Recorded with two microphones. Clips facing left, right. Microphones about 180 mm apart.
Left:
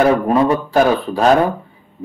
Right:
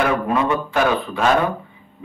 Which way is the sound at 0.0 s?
35° left (ahead or behind).